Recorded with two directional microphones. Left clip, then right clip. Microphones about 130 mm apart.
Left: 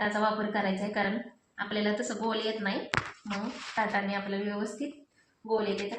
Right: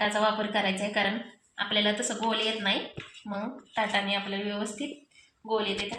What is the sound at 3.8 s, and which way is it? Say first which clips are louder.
Speech: right 3 dB; 25° right (ahead or behind).